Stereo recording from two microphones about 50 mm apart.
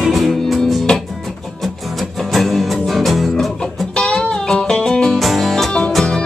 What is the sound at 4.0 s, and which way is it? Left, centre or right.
Music, left.